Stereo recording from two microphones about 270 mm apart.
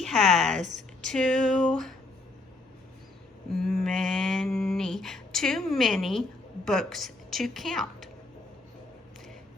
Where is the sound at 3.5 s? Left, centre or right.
Centre.